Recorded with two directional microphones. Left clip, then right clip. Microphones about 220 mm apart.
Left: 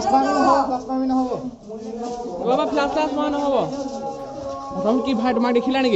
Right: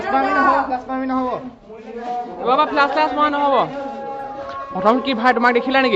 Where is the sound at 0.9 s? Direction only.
35° right (ahead or behind).